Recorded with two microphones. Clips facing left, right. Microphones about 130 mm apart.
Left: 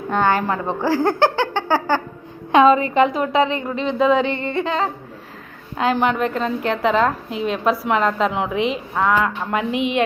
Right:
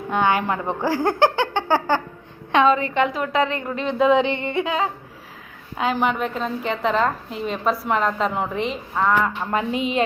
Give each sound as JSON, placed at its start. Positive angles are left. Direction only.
{"t": 0.1, "sound": "a sound", "side_deg": -10}
{"t": 0.8, "sound": "speech", "side_deg": -20}
{"t": 2.5, "sound": "a woman's voice", "side_deg": 10}
{"t": 2.9, "sound": "a woman's voice", "side_deg": 30}
{"t": 3.5, "sound": "a woman's voice", "side_deg": 0}
{"t": 3.8, "sound": "a sound", "side_deg": -10}
{"t": 5.7, "sound": "a woman's voice", "side_deg": 0}